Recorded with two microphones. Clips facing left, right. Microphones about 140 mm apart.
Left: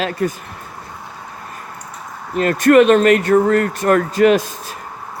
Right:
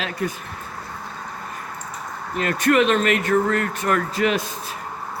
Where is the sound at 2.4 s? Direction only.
45° left (ahead or behind).